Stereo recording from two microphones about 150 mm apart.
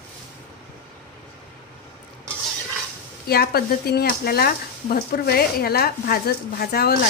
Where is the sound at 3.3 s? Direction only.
90° left.